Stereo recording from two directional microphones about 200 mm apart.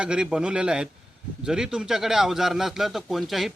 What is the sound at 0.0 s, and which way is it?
Speech, 5° right (ahead or behind).